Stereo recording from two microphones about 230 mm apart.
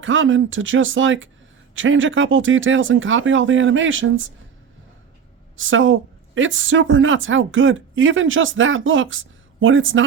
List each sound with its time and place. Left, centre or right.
0.0 s a woman's voice: right
5.5 s a woman's voice: right